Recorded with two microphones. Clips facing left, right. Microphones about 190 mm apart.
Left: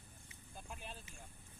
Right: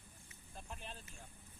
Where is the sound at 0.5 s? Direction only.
5° left (ahead or behind).